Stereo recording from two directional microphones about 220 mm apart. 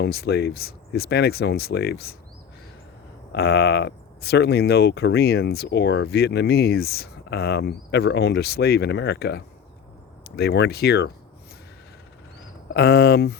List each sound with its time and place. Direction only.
0.0 s speech: 45° left (ahead or behind)
3.3 s speech: 50° left (ahead or behind)
12.7 s speech: 45° left (ahead or behind)